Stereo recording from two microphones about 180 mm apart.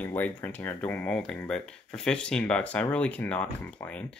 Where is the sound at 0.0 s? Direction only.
10° left (ahead or behind).